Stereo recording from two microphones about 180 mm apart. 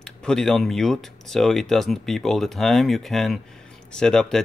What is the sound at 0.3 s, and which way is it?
Speech, centre (ahead or behind).